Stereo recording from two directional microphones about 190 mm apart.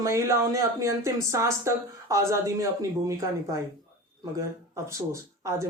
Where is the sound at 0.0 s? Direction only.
15° right (ahead or behind).